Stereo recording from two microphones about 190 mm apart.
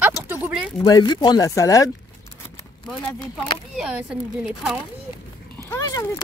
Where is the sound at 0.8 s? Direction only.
20° left (ahead or behind).